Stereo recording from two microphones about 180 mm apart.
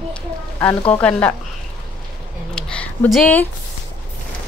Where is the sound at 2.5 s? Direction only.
5° left (ahead or behind).